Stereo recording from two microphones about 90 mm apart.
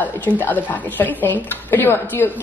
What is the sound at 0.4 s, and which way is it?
A woman's voice, 20° left (ahead or behind).